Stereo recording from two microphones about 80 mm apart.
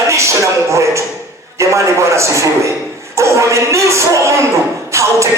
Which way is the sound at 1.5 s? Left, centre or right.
Right.